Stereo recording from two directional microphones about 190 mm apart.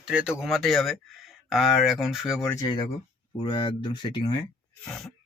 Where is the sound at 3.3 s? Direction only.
25° left (ahead or behind).